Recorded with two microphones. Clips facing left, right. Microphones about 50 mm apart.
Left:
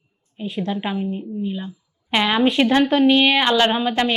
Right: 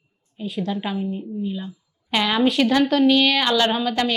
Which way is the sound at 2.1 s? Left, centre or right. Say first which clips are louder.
Left 2 dB; left.